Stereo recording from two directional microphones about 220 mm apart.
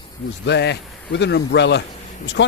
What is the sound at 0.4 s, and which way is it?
Speech, 50° left (ahead or behind).